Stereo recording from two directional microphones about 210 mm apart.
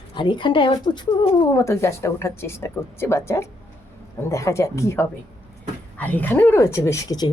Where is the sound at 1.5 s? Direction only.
15° left (ahead or behind).